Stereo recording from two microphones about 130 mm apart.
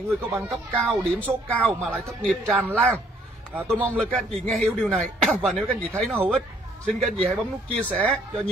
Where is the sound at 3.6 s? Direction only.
5° left (ahead or behind).